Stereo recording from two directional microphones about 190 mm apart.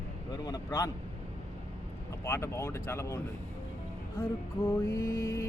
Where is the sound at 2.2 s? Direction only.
15° left (ahead or behind).